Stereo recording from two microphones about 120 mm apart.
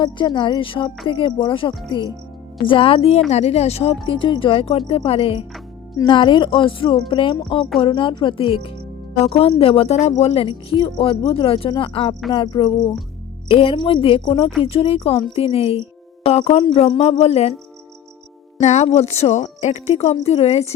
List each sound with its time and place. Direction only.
0.0 s a woman's voice: 40° left (ahead or behind); by 3.9 s 60° left (ahead or behind)
4.0 s a woman's voice: 45° left (ahead or behind); by 17.5 s 65° left (ahead or behind)
18.6 s a woman's voice: 70° left (ahead or behind)